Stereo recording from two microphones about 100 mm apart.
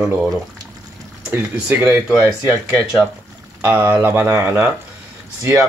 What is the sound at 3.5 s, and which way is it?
Speech, 20° right (ahead or behind).